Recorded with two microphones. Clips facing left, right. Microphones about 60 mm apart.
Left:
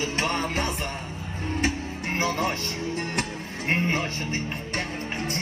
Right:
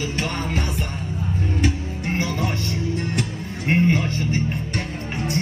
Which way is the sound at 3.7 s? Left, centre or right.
Left.